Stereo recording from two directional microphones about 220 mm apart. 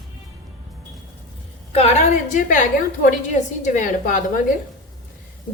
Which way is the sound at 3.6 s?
35° left (ahead or behind).